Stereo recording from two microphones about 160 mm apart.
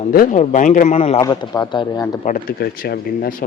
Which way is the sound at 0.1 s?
60° left (ahead or behind).